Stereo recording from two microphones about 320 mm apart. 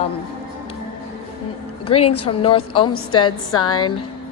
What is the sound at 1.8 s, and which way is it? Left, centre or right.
A woman's voice, centre.